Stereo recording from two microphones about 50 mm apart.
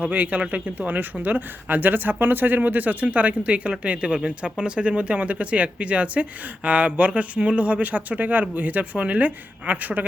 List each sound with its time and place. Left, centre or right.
0.0 s speech: right